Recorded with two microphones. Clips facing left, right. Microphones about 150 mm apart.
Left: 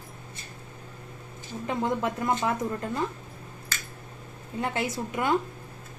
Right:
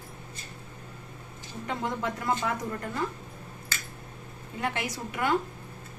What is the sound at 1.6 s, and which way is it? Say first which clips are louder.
A woman's voice: left 4 dB; 25° left (ahead or behind).